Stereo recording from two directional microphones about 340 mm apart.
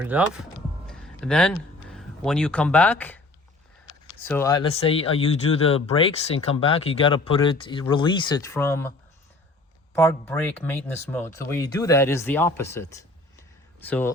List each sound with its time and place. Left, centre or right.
0.0 s speech: centre
4.3 s speech: centre
9.9 s speech: centre